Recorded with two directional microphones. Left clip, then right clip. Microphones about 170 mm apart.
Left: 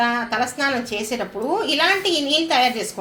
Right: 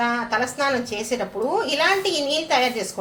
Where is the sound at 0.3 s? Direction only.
20° left (ahead or behind).